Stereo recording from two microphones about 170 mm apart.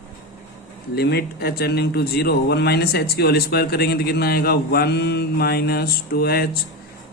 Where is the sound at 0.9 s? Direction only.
70° left (ahead or behind).